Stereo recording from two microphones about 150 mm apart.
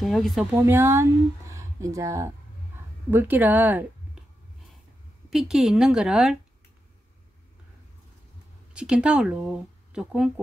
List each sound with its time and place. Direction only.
0.0 s speech: centre (ahead or behind)
0.7 s speech: 15° right (ahead or behind)
5.3 s speech: 5° right (ahead or behind)
8.7 s speech: 5° right (ahead or behind)